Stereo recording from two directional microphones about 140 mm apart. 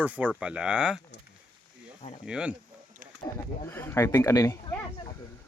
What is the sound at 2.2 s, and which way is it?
Speech, 5° right (ahead or behind).